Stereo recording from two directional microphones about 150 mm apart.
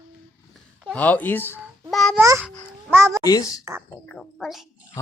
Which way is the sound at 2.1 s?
15° right (ahead or behind).